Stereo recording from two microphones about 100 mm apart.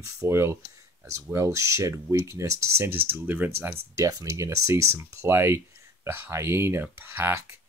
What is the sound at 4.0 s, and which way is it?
Speech, 35° right (ahead or behind).